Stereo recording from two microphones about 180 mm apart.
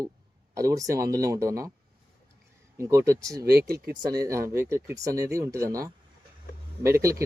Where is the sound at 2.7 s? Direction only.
15° right (ahead or behind).